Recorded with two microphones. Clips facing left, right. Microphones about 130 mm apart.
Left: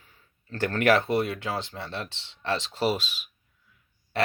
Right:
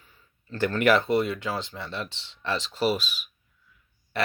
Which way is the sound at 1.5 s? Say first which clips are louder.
Even; 30° left (ahead or behind).